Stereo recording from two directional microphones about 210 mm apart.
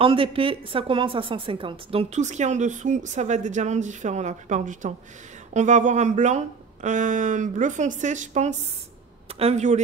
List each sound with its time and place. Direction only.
0.0 s a woman's voice: 25° right (ahead or behind)